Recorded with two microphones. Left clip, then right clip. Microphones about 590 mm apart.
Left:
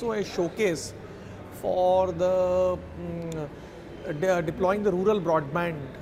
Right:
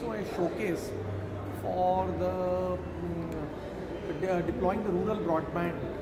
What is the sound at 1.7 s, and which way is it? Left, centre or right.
Speech, left.